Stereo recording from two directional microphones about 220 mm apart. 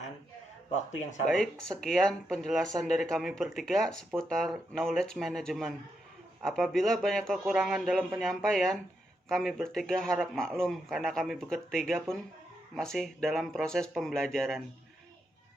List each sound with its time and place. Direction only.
1.3 s speech: 5° left (ahead or behind)